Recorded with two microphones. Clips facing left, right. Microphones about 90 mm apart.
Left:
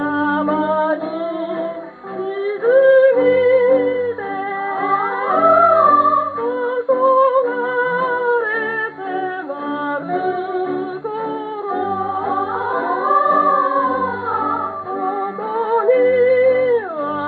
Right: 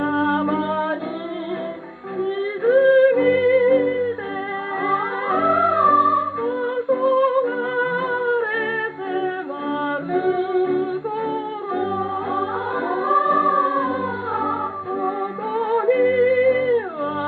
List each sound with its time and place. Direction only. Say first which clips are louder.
0.3 s music: left 4 dB; 25° left (ahead or behind)
2.6 s yodeling: left 3 dB; 35° left (ahead or behind)
3.4 s music: left 3 dB; 35° left (ahead or behind)
12.7 s music: left 3 dB; 20° left (ahead or behind)
15.7 s music: left 4 dB; 35° left (ahead or behind)
16.3 s music: left 4 dB; 25° left (ahead or behind)